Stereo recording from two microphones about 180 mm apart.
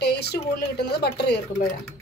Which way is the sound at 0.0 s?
65° left (ahead or behind).